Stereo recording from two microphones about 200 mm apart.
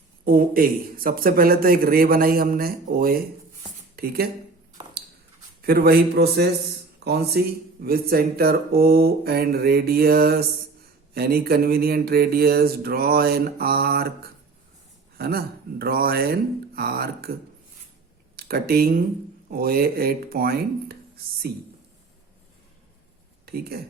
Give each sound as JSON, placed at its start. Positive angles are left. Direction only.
{"t": 0.3, "sound": "speech", "side_deg": -45}
{"t": 5.6, "sound": "speech", "side_deg": -50}
{"t": 15.2, "sound": "speech", "side_deg": -50}
{"t": 18.3, "sound": "speech", "side_deg": -50}
{"t": 23.5, "sound": "speech", "side_deg": -50}